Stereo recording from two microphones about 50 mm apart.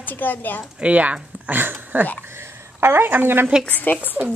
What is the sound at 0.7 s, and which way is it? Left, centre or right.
Speech, right.